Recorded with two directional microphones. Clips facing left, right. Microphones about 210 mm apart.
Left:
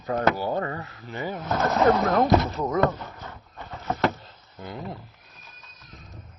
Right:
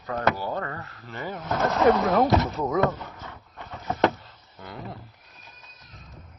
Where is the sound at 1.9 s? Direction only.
10° right (ahead or behind).